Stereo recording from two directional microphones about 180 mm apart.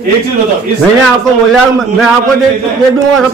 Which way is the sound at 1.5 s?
Centre (ahead or behind).